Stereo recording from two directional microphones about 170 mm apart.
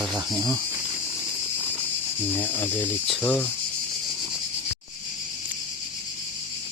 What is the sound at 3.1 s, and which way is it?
Speech, 5° left (ahead or behind).